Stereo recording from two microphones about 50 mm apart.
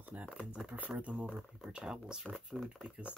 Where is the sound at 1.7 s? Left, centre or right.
Centre.